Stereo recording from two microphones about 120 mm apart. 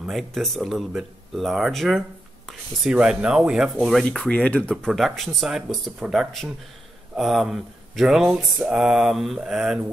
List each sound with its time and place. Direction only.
0.0 s speech: centre (ahead or behind)